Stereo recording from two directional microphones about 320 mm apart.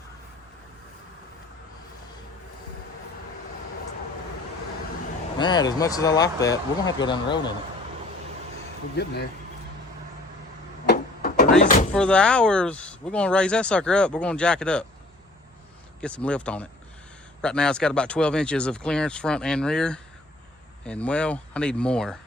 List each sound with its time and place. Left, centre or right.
5.4 s speech: centre
9.0 s speech: left
10.8 s a sound: left
11.6 s door: left
11.9 s speech: centre
16.0 s speech: centre